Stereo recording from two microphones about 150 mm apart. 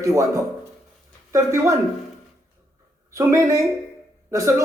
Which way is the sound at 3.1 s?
20° right (ahead or behind).